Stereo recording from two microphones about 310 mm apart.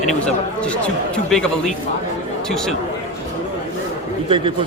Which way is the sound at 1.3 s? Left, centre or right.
Centre.